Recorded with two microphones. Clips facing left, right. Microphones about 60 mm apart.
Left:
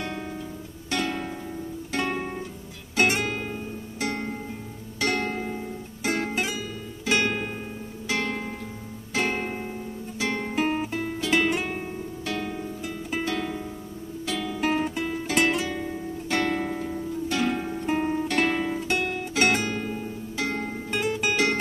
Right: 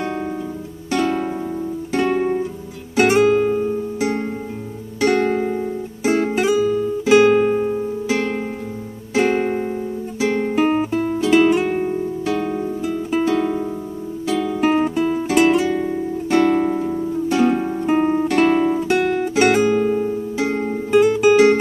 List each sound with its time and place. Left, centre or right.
1.0 s music: right
2.0 s music: centre
5.3 s music: right
6.0 s music: centre
10.9 s music: centre; by 18.3 s right
18.3 s music: centre